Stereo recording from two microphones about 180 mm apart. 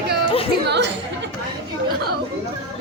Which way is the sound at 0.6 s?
70° right (ahead or behind).